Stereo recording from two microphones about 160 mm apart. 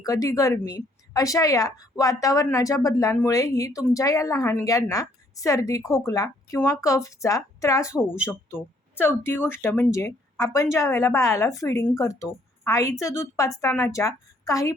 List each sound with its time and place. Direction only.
0.0 s speech: 20° left (ahead or behind)